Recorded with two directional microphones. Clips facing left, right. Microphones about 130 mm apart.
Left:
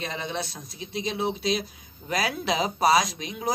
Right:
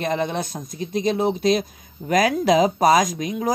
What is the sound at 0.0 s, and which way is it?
Speech, 50° right (ahead or behind).